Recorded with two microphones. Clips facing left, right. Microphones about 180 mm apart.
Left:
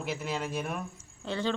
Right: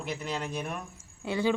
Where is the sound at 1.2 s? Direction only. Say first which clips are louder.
Right 4 dB; 10° right (ahead or behind).